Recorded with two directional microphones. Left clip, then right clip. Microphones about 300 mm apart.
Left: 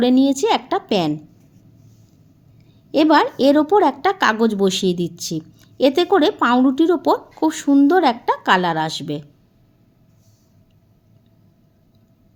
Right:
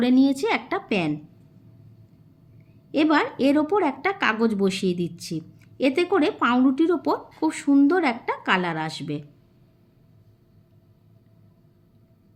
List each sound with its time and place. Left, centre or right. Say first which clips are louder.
0.0 s a woman's voice: left 5 dB; centre
2.9 s a woman's voice: left 7 dB; centre